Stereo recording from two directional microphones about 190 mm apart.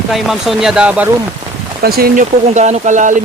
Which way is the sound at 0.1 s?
Centre (ahead or behind).